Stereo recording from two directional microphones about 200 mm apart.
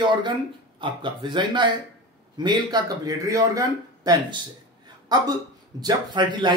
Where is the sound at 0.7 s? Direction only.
25° right (ahead or behind).